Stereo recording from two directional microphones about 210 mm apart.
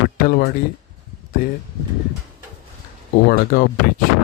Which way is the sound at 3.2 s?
45° left (ahead or behind).